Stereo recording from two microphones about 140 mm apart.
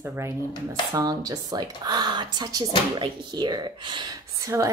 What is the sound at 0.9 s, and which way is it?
Speech, 25° right (ahead or behind).